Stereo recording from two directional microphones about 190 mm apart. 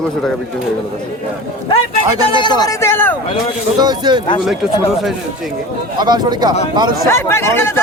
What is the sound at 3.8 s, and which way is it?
Speech, 20° right (ahead or behind).